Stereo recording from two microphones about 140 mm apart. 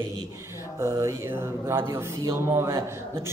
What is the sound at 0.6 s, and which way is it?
Speech, 20° right (ahead or behind).